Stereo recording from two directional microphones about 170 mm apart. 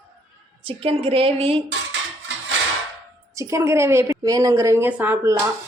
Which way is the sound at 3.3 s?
15° right (ahead or behind).